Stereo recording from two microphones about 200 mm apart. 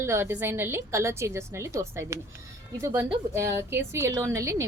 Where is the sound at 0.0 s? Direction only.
15° right (ahead or behind).